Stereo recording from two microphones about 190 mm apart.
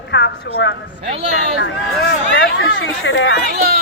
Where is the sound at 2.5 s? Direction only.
75° left (ahead or behind).